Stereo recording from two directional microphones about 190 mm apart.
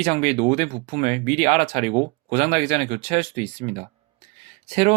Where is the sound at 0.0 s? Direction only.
35° right (ahead or behind).